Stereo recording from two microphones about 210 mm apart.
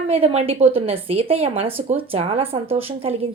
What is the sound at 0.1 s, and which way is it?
A woman's voice, 30° right (ahead or behind).